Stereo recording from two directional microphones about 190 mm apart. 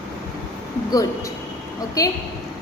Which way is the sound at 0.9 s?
20° left (ahead or behind).